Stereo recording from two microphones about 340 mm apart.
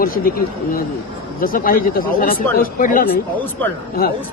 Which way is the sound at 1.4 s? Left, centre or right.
Left.